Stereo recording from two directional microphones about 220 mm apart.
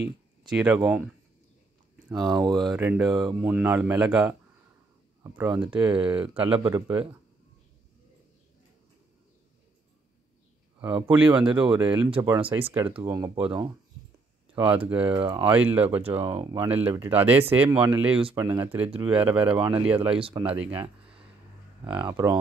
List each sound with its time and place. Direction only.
0.0 s speech: 5° right (ahead or behind)
2.6 s speech: 5° right (ahead or behind)
10.8 s speech: 5° right (ahead or behind)
12.4 s speech: 25° right (ahead or behind); by 19.5 s 5° right (ahead or behind)
19.5 s speech: 25° right (ahead or behind)
19.9 s speech: 5° right (ahead or behind)
20.2 s speech: 25° right (ahead or behind)
22.0 s speech: 15° right (ahead or behind)